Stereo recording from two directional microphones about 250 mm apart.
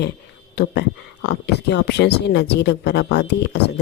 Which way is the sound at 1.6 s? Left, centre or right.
Left.